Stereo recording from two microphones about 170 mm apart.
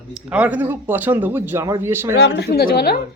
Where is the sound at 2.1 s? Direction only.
85° left; by 3.0 s 60° left (ahead or behind).